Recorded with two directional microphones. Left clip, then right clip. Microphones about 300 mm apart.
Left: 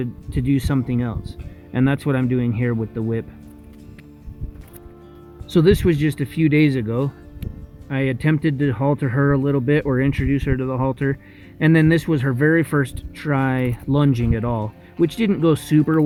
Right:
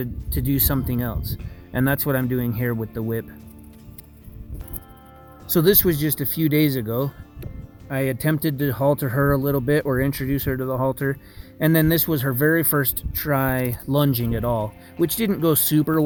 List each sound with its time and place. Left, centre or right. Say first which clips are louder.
0.0 s speech: left 3 dB; centre
5.5 s speech: left 2 dB; centre